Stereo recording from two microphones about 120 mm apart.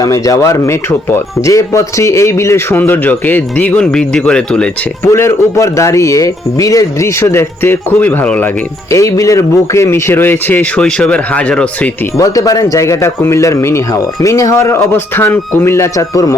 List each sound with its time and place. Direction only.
0.0 s speech: 25° left (ahead or behind); by 4.7 s 10° left (ahead or behind)
5.1 s speech: 25° left (ahead or behind)
8.9 s speech: 25° left (ahead or behind); by 11.9 s 10° left (ahead or behind)
12.1 s speech: 30° left (ahead or behind)